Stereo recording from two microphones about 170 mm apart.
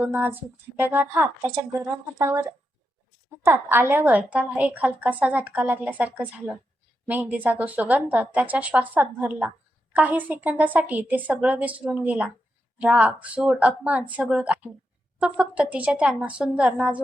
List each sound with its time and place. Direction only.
0.0 s a woman's voice: 10° right (ahead or behind)
3.4 s a woman's voice: 15° right (ahead or behind)